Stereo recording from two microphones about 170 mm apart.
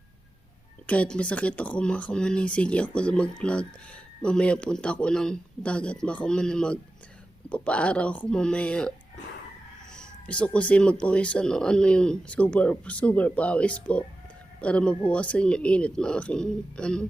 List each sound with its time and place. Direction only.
0.9 s speech: 5° left (ahead or behind)
9.9 s speech: 5° left (ahead or behind)